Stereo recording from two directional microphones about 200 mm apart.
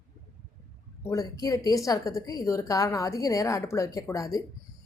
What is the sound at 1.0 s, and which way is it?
A woman's voice, 20° left (ahead or behind).